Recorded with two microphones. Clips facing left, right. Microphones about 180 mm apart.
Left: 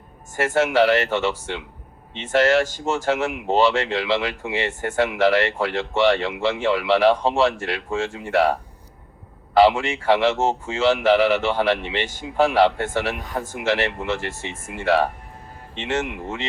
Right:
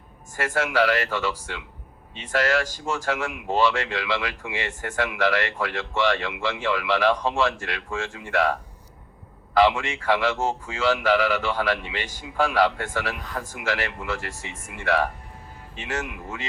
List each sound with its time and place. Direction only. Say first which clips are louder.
0.3 s speech: left 5 dB; 25° left (ahead or behind)
9.6 s speech: left 4 dB; 30° left (ahead or behind)